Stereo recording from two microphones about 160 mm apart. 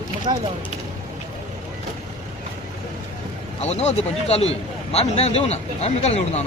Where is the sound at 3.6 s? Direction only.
45° left (ahead or behind).